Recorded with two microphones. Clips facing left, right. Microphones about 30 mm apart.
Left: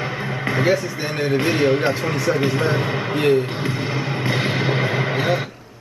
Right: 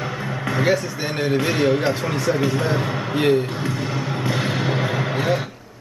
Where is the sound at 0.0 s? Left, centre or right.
Left.